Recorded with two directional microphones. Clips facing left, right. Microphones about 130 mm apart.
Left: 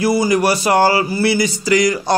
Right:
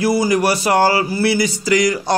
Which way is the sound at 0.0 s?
25° left (ahead or behind).